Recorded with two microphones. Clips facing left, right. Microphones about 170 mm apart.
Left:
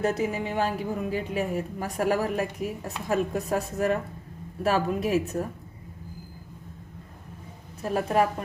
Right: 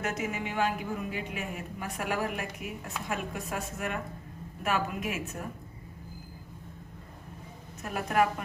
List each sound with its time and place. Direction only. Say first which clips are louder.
0.0 s a woman's voice: left 7 dB; 30° left (ahead or behind)
7.8 s a woman's voice: left 4 dB; 30° left (ahead or behind)